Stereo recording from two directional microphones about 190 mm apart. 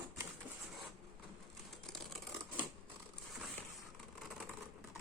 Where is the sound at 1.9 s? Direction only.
Centre (ahead or behind).